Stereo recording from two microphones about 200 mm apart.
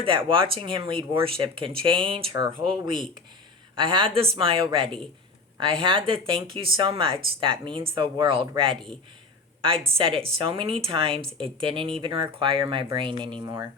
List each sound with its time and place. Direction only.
0.0 s speech: 25° right (ahead or behind)
9.8 s speech: 25° right (ahead or behind)